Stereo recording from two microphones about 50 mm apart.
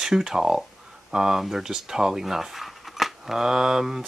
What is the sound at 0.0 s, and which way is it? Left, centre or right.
Speech, centre.